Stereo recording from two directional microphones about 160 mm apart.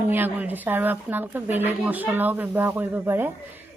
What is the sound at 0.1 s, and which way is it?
Speech, 10° right (ahead or behind).